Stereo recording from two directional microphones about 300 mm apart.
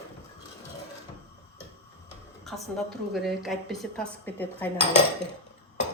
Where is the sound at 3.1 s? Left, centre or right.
Centre.